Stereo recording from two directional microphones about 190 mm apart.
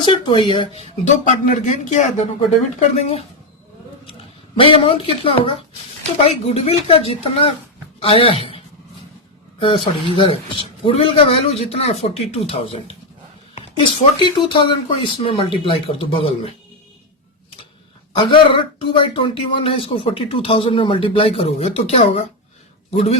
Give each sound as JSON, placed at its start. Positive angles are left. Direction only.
{"t": 0.0, "sound": "speech", "side_deg": 25}
{"t": 4.5, "sound": "a woman's voice", "side_deg": 30}
{"t": 18.2, "sound": "speech", "side_deg": 25}